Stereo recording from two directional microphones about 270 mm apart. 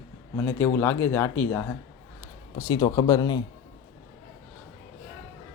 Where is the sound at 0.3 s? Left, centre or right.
Centre.